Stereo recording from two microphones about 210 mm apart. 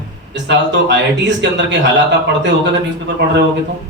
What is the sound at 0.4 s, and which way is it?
A man's voice, 55° right (ahead or behind).